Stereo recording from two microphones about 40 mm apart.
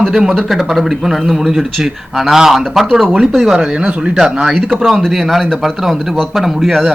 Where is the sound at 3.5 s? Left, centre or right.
Right.